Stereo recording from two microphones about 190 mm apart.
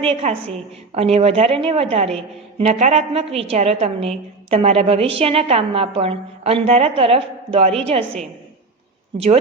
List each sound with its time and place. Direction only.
0.0 s a woman's voice: 30° right (ahead or behind)